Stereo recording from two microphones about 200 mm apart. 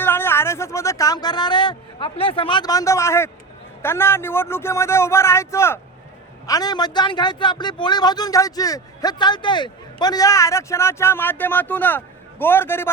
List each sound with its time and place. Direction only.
0.0 s a man's voice: 10° left (ahead or behind)